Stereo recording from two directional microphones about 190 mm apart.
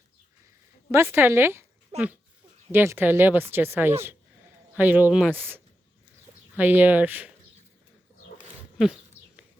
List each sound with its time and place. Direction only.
0.9 s speech: 15° right (ahead or behind)
1.9 s speech: 35° right (ahead or behind)
2.7 s speech: 10° right (ahead or behind)
8.8 s a sound: 5° right (ahead or behind)